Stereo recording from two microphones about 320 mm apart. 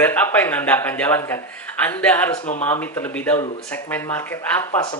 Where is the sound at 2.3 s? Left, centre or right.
Left.